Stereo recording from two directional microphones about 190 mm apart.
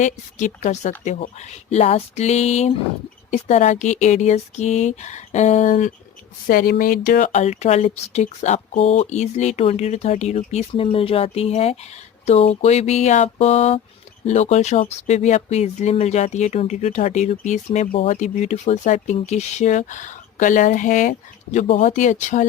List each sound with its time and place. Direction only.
0.0 s speech: 40° left (ahead or behind)